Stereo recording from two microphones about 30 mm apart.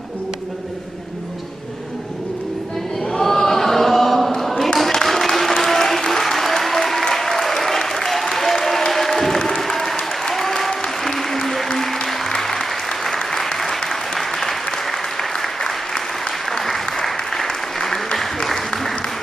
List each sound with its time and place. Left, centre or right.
3.1 s chant: centre
5.0 s applause: centre